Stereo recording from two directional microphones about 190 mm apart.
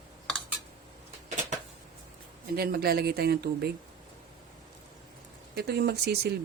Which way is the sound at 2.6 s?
55° right (ahead or behind).